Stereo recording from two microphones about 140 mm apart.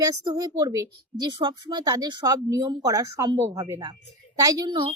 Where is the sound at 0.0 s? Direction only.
25° right (ahead or behind).